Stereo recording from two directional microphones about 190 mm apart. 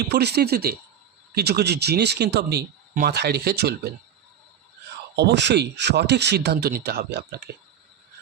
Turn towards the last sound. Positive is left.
turn(degrees=-55)  # may be behind; listen again after turning